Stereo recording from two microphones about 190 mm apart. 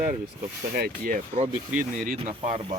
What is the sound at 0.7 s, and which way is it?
Speech, 50° right (ahead or behind).